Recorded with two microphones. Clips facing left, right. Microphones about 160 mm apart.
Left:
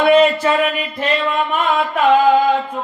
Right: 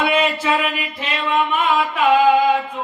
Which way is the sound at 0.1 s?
40° left (ahead or behind).